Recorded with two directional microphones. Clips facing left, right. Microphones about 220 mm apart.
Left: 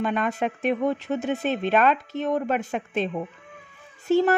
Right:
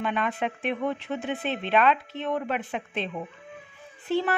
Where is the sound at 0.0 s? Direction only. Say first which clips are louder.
Left 3 dB; 45° left (ahead or behind).